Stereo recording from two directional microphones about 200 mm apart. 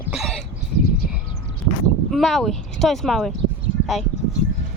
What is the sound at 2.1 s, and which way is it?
Speech, centre (ahead or behind).